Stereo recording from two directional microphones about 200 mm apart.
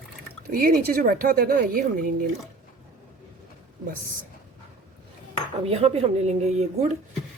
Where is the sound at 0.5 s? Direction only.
45° right (ahead or behind).